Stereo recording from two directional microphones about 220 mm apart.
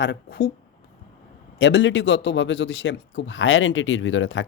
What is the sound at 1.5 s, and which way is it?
A man's voice, 55° left (ahead or behind).